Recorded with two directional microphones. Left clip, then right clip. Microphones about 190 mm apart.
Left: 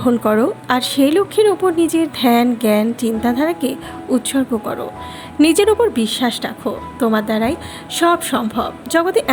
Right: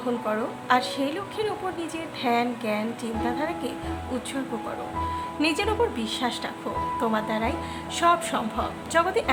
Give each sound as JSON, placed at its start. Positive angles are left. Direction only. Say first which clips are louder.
{"t": 0.0, "sound": "a woman's voice", "louder": "left 12 dB", "side_deg": 40}
{"t": 5.4, "sound": "a woman's voice", "louder": "left 12 dB", "side_deg": 40}